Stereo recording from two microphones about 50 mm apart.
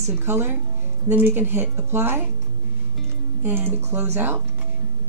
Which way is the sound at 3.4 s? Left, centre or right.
Right.